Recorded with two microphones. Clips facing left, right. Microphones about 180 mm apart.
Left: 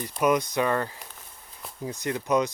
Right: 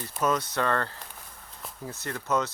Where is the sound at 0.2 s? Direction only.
15° left (ahead or behind).